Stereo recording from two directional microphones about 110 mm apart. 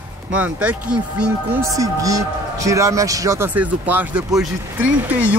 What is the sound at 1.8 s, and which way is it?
A man's voice, 30° right (ahead or behind).